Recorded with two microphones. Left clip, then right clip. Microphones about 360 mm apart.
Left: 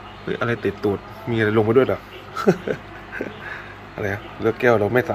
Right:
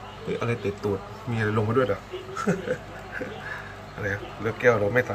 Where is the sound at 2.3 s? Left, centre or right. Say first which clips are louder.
Left 8 dB; centre.